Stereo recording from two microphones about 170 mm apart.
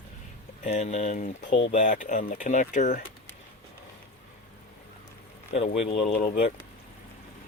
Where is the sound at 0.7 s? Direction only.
40° left (ahead or behind).